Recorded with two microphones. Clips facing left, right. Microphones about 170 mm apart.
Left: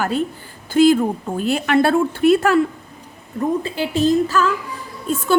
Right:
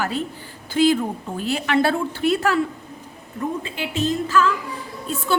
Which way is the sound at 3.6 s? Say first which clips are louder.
Left 6 dB; 35° left (ahead or behind).